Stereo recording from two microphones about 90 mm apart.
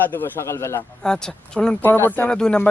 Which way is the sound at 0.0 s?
20° left (ahead or behind).